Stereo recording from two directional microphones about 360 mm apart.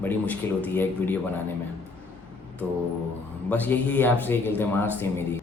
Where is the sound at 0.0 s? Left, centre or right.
Centre.